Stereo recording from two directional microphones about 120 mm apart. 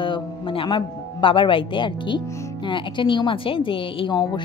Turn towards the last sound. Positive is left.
turn(degrees=35)  # may be behind; listen again after turning